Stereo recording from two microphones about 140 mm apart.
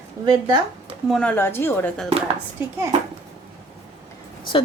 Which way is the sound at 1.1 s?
10° left (ahead or behind).